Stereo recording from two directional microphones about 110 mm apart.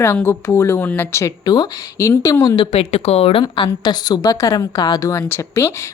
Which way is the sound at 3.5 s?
45° left (ahead or behind).